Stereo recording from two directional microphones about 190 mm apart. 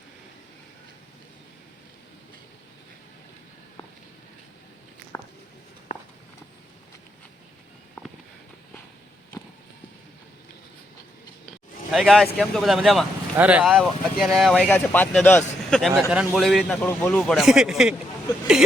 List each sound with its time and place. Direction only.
5.1 s a sound: 20° left (ahead or behind)
5.9 s walk: 40° left (ahead or behind)
11.9 s speech: centre (ahead or behind)